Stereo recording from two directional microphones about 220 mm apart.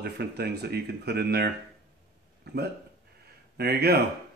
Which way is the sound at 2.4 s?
45° right (ahead or behind).